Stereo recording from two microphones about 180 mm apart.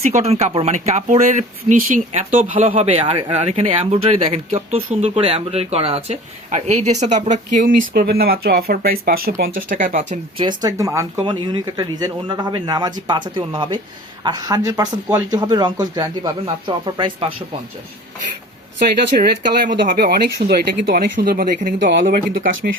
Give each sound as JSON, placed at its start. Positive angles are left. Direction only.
{"t": 0.0, "sound": "speech", "side_deg": -40}
{"t": 10.3, "sound": "speech", "side_deg": -25}
{"t": 19.2, "sound": "speech", "side_deg": -55}
{"t": 21.8, "sound": "speech", "side_deg": -75}
{"t": 22.0, "sound": "speech", "side_deg": -50}